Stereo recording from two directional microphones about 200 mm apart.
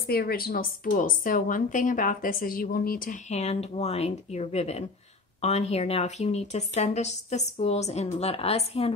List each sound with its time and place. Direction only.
0.0 s a woman's voice: 50° left (ahead or behind); by 8.9 s 30° left (ahead or behind)